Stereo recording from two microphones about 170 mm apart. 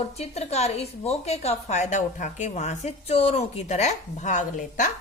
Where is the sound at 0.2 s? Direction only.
40° left (ahead or behind).